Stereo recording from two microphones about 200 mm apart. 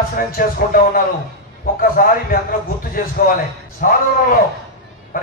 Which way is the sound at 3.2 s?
45° left (ahead or behind).